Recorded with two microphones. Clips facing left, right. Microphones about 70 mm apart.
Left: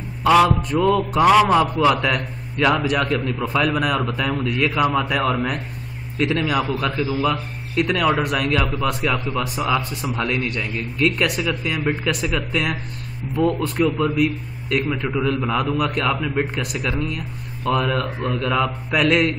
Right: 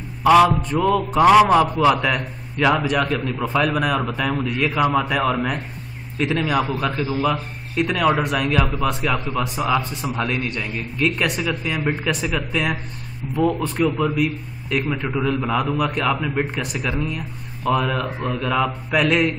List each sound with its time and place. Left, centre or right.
0.2 s mantra: centre
0.8 s a man's voice: centre
5.2 s a man's voice: centre
6.6 s a man's voice: centre
7.3 s a man's voice: centre
8.0 s a man's voice: centre
9.7 s a man's voice: right
10.0 s a man's voice: centre
13.8 s a man's voice: centre